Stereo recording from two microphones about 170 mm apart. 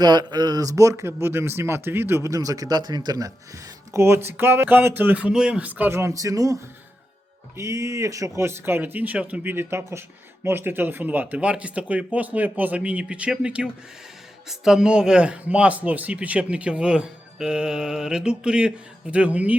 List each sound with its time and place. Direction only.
0.0 s speech: 25° right (ahead or behind); by 19.5 s 10° right (ahead or behind)